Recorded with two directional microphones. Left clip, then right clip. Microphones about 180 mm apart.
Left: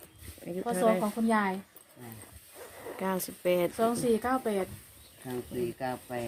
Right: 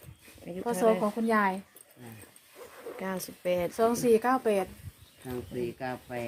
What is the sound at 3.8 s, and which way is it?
Speech, 40° right (ahead or behind).